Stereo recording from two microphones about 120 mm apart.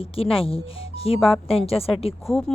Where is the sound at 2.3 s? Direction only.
5° left (ahead or behind).